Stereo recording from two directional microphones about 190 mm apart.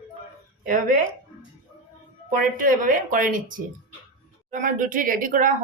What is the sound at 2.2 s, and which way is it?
A woman's voice, 45° right (ahead or behind).